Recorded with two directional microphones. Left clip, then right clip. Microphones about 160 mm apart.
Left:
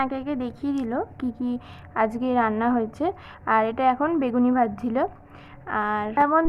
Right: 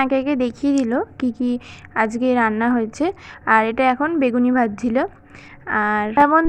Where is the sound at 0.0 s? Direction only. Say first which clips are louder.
Right 8 dB; 25° right (ahead or behind).